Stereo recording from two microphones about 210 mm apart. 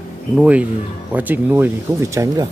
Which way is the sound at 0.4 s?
5° right (ahead or behind).